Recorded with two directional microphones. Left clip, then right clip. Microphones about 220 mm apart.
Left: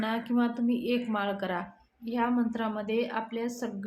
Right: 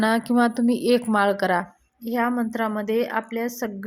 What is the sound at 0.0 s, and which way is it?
A woman's voice, 45° right (ahead or behind).